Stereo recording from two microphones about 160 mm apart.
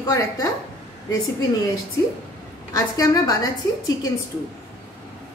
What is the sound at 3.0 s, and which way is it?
Speech, 20° left (ahead or behind).